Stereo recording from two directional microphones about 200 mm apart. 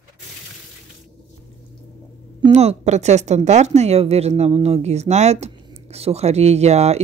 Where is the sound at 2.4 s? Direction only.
35° right (ahead or behind).